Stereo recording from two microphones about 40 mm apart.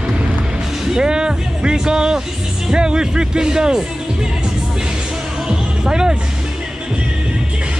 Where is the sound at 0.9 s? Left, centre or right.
Centre.